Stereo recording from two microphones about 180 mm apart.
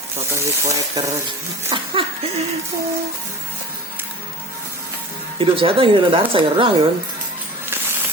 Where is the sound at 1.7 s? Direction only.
30° right (ahead or behind).